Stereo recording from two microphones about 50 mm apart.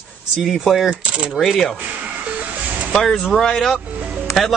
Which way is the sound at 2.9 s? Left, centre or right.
Centre.